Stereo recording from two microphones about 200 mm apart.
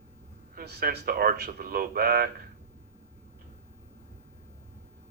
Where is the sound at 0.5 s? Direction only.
50° right (ahead or behind).